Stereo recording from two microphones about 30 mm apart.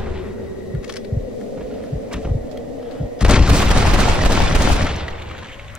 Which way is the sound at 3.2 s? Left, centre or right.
Right.